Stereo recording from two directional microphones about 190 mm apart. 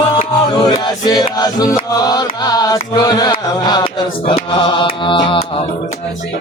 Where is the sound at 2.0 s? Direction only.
20° left (ahead or behind).